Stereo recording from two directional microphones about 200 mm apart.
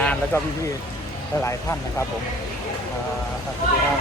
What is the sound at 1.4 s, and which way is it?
Speech, 15° left (ahead or behind).